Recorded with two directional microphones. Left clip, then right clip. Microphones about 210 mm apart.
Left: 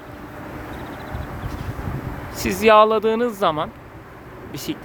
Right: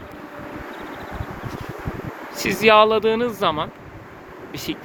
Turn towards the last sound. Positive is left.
turn(degrees=10)  # may be behind; listen again after turning